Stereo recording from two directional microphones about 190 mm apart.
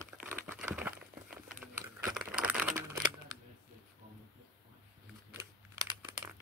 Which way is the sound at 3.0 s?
20° right (ahead or behind).